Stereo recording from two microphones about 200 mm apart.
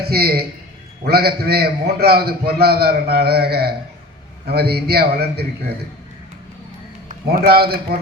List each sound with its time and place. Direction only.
0.0 s a man's voice: 50° right (ahead or behind)
7.1 s a man's voice: 45° right (ahead or behind)